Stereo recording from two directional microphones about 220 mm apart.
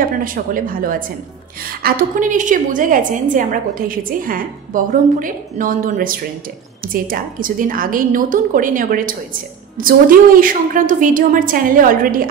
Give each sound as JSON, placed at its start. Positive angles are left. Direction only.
{"t": 0.0, "sound": "a woman's voice", "side_deg": -40}